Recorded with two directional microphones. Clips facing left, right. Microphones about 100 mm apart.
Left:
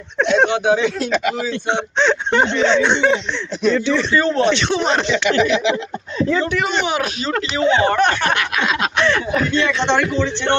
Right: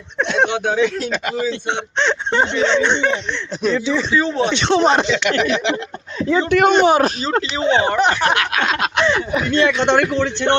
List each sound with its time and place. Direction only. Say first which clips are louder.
0.2 s speech: left 2 dB; 5° left (ahead or behind)
2.8 s a sound: left 2 dB; 10° left (ahead or behind)
3.7 s speech: left 2 dB; 5° right (ahead or behind)
4.6 s speech: right 4 dB; 30° right (ahead or behind)
5.1 s speech: left 2 dB; 60° right (ahead or behind)
6.2 s speech: right 2 dB; 15° right (ahead or behind)
6.5 s speech: right 7 dB; 50° right (ahead or behind)
6.8 s speech: right 6 dB; 35° right (ahead or behind)
7.9 s speech: even; 15° right (ahead or behind)
9.9 s speech: right 1 dB; 45° right (ahead or behind)